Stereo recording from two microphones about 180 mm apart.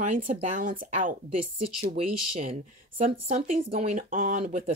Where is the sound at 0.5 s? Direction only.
50° right (ahead or behind).